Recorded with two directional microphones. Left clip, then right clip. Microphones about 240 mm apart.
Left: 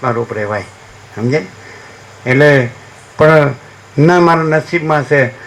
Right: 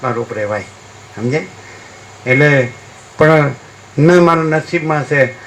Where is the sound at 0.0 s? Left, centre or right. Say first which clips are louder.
Left 2 dB; left.